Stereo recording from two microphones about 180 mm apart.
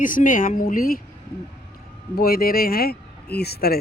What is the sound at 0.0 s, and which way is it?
Speech, 50° left (ahead or behind).